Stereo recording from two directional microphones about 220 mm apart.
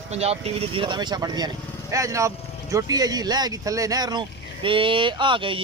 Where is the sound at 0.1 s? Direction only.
30° right (ahead or behind).